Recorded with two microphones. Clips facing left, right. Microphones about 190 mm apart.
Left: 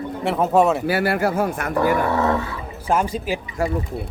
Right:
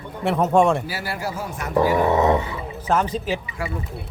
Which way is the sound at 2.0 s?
20° right (ahead or behind).